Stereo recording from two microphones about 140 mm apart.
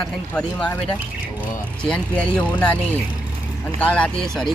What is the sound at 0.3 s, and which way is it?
Speech, 5° left (ahead or behind).